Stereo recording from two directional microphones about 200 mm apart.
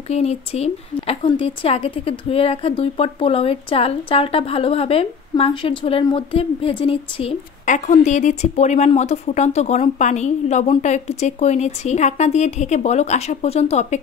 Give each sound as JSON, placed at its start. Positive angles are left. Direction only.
{"t": 0.1, "sound": "a woman's voice", "side_deg": 30}